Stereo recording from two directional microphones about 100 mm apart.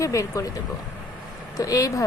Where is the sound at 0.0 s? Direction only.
35° left (ahead or behind).